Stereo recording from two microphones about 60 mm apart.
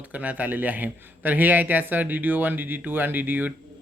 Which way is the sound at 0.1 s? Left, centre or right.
Right.